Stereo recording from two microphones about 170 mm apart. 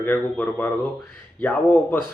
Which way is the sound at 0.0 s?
10° left (ahead or behind).